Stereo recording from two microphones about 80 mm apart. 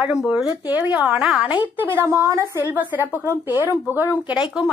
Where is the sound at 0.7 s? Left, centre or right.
Centre; by 2.6 s right.